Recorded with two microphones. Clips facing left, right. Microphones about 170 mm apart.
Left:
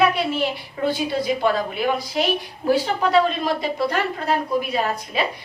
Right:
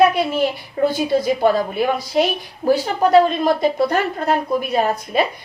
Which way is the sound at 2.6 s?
40° right (ahead or behind).